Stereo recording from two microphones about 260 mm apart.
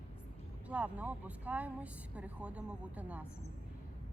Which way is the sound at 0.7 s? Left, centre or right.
Centre.